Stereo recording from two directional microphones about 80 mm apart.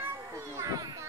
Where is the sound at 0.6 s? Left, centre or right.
Right.